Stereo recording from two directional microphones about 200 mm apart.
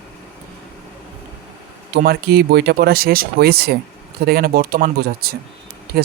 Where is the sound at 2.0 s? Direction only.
50° right (ahead or behind).